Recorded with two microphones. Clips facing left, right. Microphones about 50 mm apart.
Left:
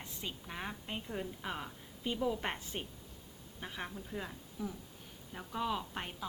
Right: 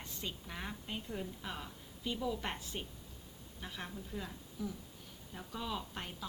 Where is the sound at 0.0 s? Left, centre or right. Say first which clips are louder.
Even; centre.